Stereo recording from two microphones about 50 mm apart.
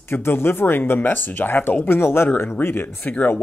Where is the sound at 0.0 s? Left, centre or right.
Left.